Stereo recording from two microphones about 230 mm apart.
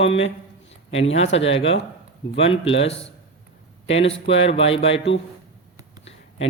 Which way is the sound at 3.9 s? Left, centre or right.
Left.